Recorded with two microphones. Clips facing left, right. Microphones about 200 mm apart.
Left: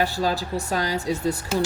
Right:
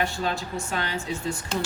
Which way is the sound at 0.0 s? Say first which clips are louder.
Left 4 dB; 35° left (ahead or behind).